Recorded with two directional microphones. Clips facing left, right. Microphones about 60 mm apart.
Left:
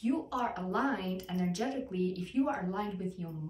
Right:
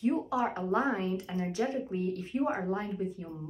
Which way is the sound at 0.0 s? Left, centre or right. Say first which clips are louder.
Right 3 dB; right.